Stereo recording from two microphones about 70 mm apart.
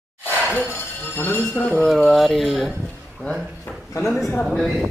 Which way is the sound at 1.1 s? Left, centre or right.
Left.